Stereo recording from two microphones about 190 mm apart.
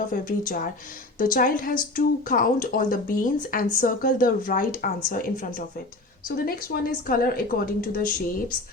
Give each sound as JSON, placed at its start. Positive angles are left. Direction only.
{"t": 0.1, "sound": "a woman's voice", "side_deg": 45}